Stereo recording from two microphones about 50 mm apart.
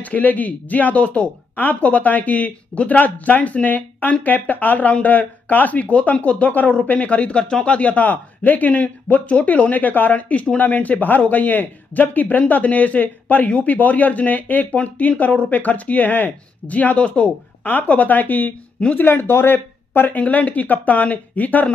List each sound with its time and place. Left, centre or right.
0.0 s a man's voice: left
20.2 s a man's voice: left